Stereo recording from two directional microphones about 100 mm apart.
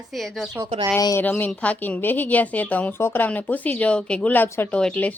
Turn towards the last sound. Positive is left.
turn(degrees=15)  # may be behind; listen again after turning